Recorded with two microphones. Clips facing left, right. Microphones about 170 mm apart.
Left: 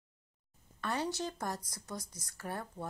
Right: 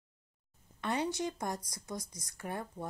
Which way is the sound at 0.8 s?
15° right (ahead or behind).